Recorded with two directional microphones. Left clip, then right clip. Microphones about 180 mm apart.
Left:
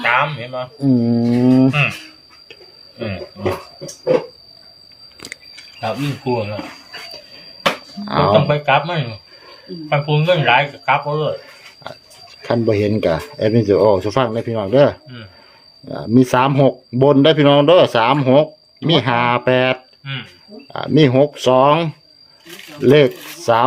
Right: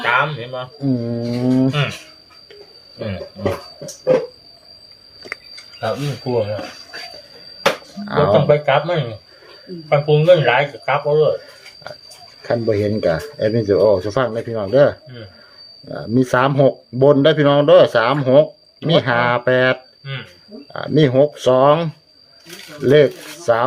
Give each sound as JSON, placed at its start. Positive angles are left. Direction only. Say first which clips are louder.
{"t": 0.0, "sound": "speech", "louder": "left 1 dB", "side_deg": -35}
{"t": 0.8, "sound": "speech", "louder": "left 6 dB", "side_deg": 30}
{"t": 5.8, "sound": "speech", "louder": "even", "side_deg": -20}
{"t": 8.0, "sound": "speech", "louder": "left 1 dB", "side_deg": 20}
{"t": 8.4, "sound": "speech", "louder": "right 1 dB", "side_deg": -45}
{"t": 9.9, "sound": "speech", "louder": "right 4 dB", "side_deg": -40}
{"t": 12.4, "sound": "speech", "louder": "left 1 dB", "side_deg": 25}